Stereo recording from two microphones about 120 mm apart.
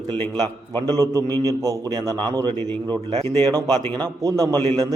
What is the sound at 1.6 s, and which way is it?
A man's voice, 30° right (ahead or behind).